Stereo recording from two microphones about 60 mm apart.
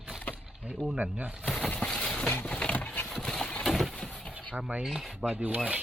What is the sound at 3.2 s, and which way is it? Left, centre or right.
Engine, centre.